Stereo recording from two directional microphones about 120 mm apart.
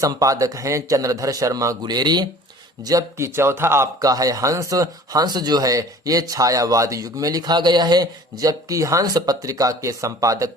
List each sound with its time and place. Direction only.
0.0 s speech: 30° right (ahead or behind)